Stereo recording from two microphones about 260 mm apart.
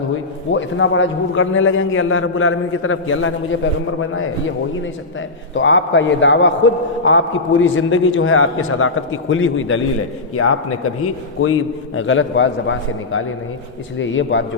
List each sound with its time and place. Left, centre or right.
0.5 s a man's voice: left
5.5 s a man's voice: left